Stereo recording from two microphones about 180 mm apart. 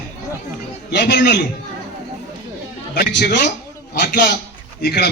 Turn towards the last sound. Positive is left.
turn(degrees=60)  # may be behind; listen again after turning